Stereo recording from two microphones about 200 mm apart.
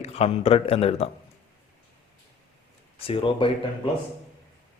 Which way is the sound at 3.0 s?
25° left (ahead or behind).